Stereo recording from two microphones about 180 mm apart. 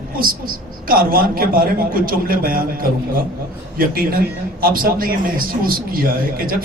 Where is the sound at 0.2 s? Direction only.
55° right (ahead or behind).